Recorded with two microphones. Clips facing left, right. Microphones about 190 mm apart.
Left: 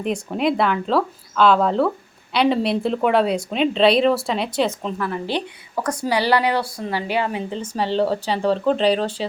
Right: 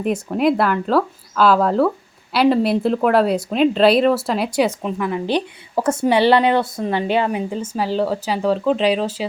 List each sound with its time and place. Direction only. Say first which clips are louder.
0.0 s speech: right 3 dB; 5° right (ahead or behind); by 7.4 s 20° right (ahead or behind)
7.5 s speech: right 1 dB; 5° right (ahead or behind)